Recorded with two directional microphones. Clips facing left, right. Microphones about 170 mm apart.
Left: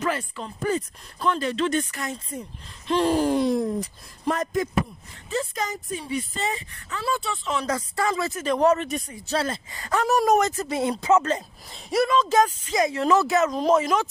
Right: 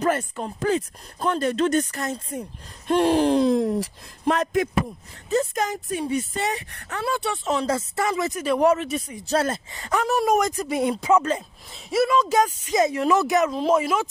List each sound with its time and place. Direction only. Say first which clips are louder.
0.6 s speech: right 2 dB; 80° right
1.2 s speech: right 2 dB; 45° right (ahead or behind)
2.9 s speech: right 3 dB; 65° right (ahead or behind)
5.3 s speech: right 5 dB; 45° right (ahead or behind)
6.4 s speech: right 2 dB; 70° right (ahead or behind)
7.4 s speech: right 4 dB; 35° right (ahead or behind); by 9.0 s centre (ahead or behind)
9.2 s speech: right 4 dB; 45° right (ahead or behind)
9.7 s speech: right 1 dB; 20° right (ahead or behind)
10.0 s speech: left 1 dB; 5° right (ahead or behind)